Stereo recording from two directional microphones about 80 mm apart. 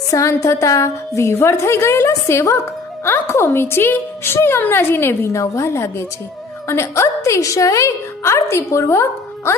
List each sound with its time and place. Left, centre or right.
0.1 s a woman's voice: left